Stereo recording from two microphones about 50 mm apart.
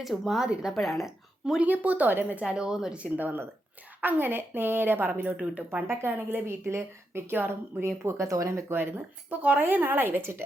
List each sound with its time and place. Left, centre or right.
0.0 s speech: centre
0.4 s speech: centre
0.7 s speech: centre
1.6 s speech: right
2.4 s speech: centre
3.0 s speech: right
5.4 s speech: right
6.1 s a woman's voice: right
9.3 s speech: right